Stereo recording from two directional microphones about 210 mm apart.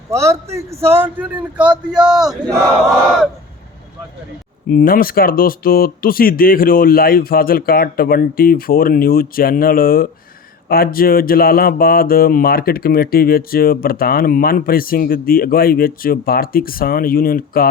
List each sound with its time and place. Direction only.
0.1 s a man's voice: 15° right (ahead or behind)
4.7 s speech: 40° left (ahead or behind)